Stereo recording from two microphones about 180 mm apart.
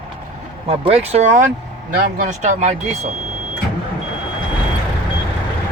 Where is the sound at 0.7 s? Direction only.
35° right (ahead or behind).